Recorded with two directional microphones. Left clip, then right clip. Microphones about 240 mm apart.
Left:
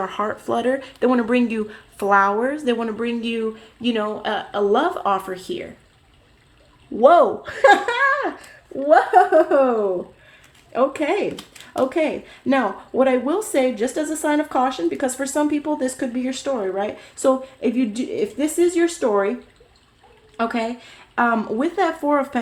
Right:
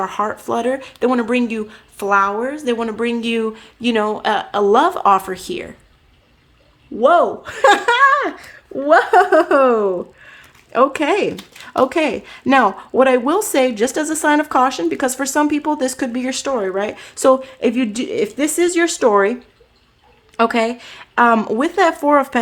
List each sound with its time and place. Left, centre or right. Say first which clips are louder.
0.0 s speech: right 4 dB; centre
7.0 s speech: even; centre; by 22.4 s right